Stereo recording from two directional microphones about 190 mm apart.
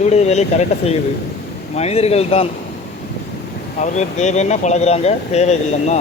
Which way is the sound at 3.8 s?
40° left (ahead or behind).